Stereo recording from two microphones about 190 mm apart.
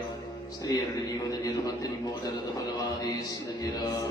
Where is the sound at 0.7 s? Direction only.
20° left (ahead or behind).